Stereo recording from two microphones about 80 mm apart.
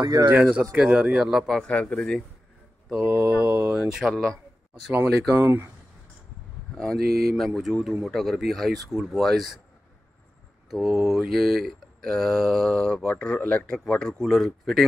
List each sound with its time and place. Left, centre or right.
0.0 s speech: right
0.3 s speech: right
1.7 s speech: centre
2.9 s speech: centre
4.1 s speech: centre
5.4 s speech: right
6.8 s mantra: centre
10.7 s mantra: centre
13.1 s speech: centre